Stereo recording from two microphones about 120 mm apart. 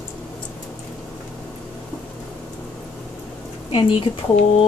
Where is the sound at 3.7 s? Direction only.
45° left (ahead or behind).